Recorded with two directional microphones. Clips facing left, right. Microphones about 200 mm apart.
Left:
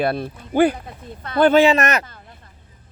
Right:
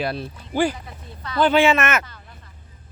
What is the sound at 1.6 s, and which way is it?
Speech, 35° left (ahead or behind).